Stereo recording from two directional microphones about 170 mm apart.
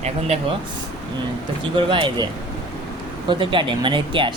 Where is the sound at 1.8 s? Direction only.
30° right (ahead or behind).